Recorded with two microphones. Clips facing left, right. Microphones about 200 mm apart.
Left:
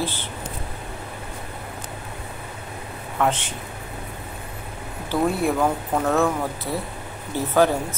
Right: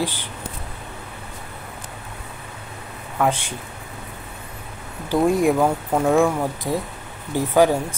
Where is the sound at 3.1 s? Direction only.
10° right (ahead or behind).